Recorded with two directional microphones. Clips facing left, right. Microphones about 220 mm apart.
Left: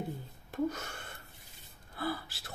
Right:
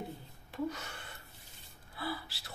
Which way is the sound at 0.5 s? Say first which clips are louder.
Left 4 dB; 45° left (ahead or behind).